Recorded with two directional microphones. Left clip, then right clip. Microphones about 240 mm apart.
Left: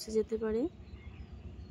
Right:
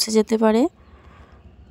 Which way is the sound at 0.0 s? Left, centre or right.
Right.